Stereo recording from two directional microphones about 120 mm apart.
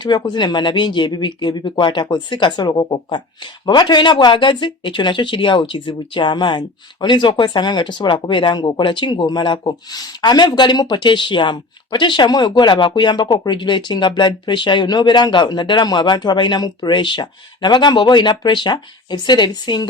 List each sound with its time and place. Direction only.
0.0 s speech: 40° left (ahead or behind)